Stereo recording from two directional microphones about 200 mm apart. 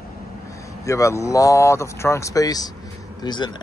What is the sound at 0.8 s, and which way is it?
Speech, 15° left (ahead or behind).